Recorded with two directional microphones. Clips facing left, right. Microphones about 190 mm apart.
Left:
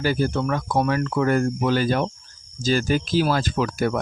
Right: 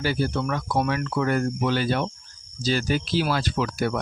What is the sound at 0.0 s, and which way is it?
Speech, 45° left (ahead or behind).